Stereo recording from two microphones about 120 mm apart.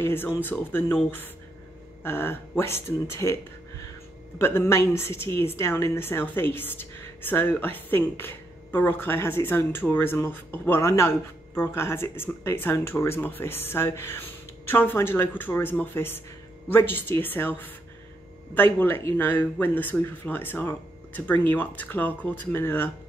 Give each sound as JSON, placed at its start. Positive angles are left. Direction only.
{"t": 0.0, "sound": "speech", "side_deg": 20}
{"t": 2.0, "sound": "a woman's voice", "side_deg": 20}
{"t": 4.4, "sound": "a woman's voice", "side_deg": 20}